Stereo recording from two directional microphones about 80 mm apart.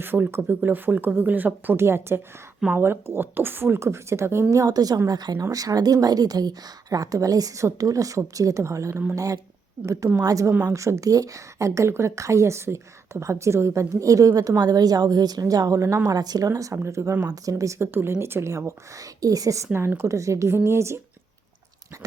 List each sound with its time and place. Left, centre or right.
0.0 s speech: right
4.5 s speech: right
16.0 s speech: right
19.7 s speech: right